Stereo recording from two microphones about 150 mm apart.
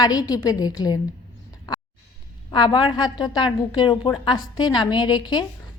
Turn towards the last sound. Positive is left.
turn(degrees=30)  # may be behind; listen again after turning